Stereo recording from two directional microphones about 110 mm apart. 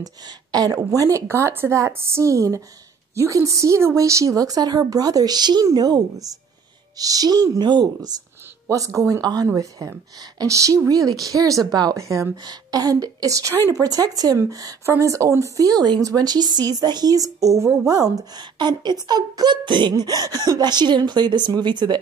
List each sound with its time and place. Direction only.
0.0 s a woman's voice: 35° right (ahead or behind)
8.6 s a woman's voice: 30° right (ahead or behind)